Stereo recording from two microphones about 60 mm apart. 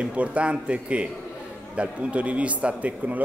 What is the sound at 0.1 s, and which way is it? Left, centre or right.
Speech, right.